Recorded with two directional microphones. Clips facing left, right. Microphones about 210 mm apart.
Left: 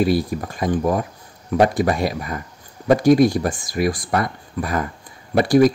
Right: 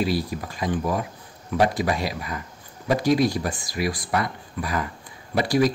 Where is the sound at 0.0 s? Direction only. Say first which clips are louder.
Left 6 dB; 50° left (ahead or behind).